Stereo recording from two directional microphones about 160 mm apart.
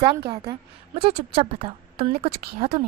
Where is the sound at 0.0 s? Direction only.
30° right (ahead or behind).